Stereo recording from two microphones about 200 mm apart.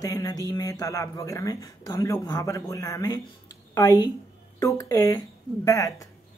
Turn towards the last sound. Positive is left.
turn(degrees=15)  # may be behind; listen again after turning